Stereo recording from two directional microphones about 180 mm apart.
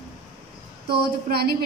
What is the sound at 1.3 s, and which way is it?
Speech, 60° right (ahead or behind).